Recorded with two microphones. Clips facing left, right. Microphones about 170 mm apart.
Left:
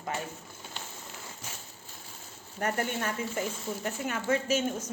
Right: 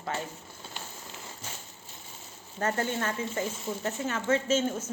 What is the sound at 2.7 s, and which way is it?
Speech, 25° right (ahead or behind).